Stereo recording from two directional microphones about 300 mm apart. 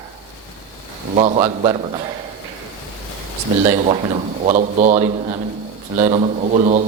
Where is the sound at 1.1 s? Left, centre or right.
Right.